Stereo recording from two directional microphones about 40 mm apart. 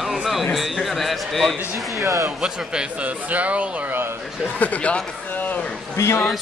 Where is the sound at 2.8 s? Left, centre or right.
Right.